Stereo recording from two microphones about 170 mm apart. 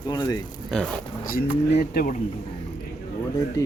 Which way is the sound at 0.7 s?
5° left (ahead or behind).